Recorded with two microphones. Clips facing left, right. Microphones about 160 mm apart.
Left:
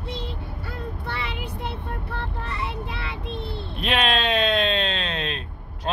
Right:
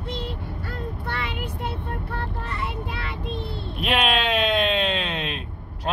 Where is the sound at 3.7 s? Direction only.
10° right (ahead or behind).